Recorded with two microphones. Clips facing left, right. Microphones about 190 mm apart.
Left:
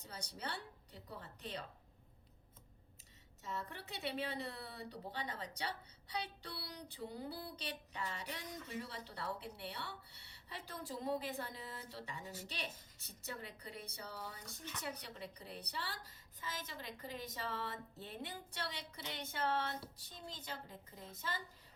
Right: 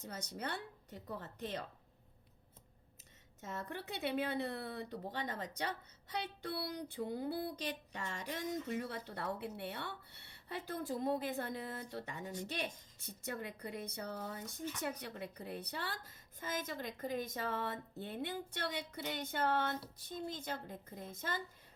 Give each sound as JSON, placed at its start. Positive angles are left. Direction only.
{"t": 0.0, "sound": "a woman's voice", "side_deg": -50}
{"t": 3.4, "sound": "a woman's voice", "side_deg": -50}